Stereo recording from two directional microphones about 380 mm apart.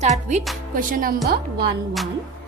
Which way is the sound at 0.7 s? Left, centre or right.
Right.